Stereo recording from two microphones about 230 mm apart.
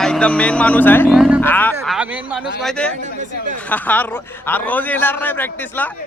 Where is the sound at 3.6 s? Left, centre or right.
Centre.